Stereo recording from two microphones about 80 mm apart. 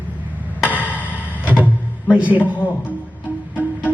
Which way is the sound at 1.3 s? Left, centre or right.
Centre.